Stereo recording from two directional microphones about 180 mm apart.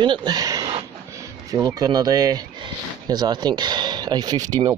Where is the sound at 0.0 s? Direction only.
25° right (ahead or behind).